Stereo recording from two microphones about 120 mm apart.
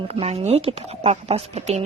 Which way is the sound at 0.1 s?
55° right (ahead or behind).